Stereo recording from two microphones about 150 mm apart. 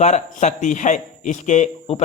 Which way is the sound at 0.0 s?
50° left (ahead or behind).